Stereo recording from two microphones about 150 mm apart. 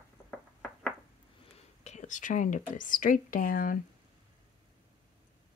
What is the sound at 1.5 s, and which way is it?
Speech, 45° left (ahead or behind).